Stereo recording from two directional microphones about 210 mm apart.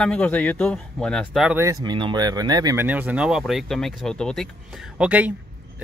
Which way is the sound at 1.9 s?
20° right (ahead or behind).